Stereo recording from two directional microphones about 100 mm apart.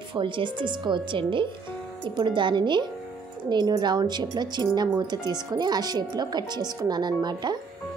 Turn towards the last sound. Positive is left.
turn(degrees=-45)  # may be behind; listen again after turning